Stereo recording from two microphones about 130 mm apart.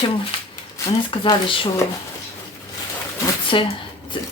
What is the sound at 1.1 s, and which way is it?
Speech, 40° left (ahead or behind).